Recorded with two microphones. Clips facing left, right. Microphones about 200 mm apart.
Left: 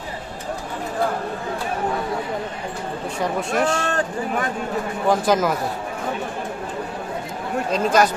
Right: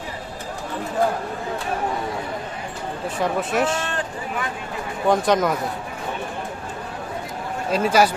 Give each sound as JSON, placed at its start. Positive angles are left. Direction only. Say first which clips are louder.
{"t": 3.2, "sound": "speech", "louder": "even", "side_deg": 0}
{"t": 3.8, "sound": "speech", "louder": "left 5 dB", "side_deg": 45}
{"t": 5.0, "sound": "speech", "louder": "right 1 dB", "side_deg": 0}
{"t": 7.7, "sound": "speech", "louder": "right 1 dB", "side_deg": -5}